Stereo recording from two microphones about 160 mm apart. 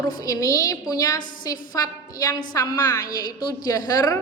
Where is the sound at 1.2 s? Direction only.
55° left (ahead or behind).